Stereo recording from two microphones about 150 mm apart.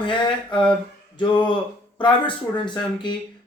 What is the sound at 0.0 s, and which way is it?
Speech, 35° left (ahead or behind).